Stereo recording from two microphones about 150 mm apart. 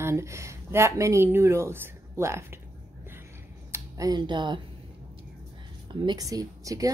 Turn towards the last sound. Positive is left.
turn(degrees=-25)  # may be behind; listen again after turning